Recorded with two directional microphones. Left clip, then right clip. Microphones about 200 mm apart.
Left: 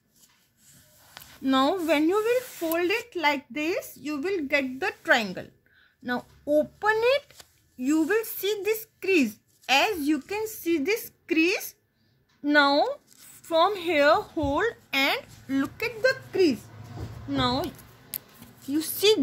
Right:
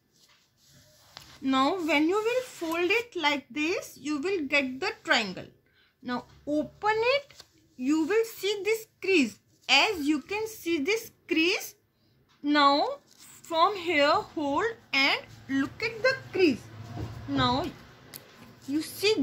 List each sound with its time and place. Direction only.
1.4 s a woman's voice: 45° left (ahead or behind)
18.7 s speech: 50° left (ahead or behind)